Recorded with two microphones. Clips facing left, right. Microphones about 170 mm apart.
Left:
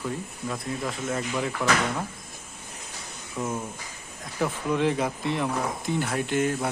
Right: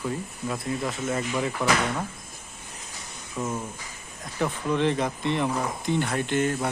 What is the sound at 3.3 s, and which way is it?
Speech, 10° left (ahead or behind).